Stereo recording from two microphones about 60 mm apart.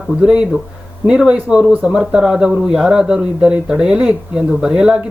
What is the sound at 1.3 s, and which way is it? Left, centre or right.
Speech, right.